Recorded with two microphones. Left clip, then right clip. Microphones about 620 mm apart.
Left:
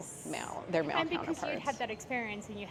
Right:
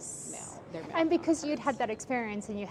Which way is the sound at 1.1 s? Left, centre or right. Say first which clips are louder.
Right 6 dB; right.